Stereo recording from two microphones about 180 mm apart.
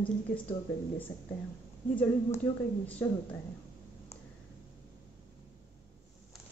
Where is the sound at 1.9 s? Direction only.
10° left (ahead or behind).